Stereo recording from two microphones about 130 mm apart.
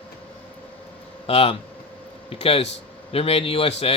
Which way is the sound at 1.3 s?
50° left (ahead or behind).